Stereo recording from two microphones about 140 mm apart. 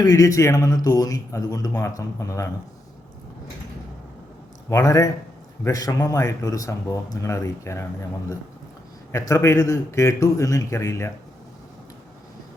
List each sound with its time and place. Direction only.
0.0 s a man's voice: 25° left (ahead or behind)
4.7 s a man's voice: 25° left (ahead or behind)
9.1 s a man's voice: 20° left (ahead or behind)